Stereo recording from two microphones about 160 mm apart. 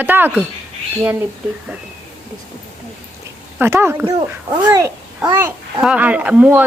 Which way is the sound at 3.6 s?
15° right (ahead or behind).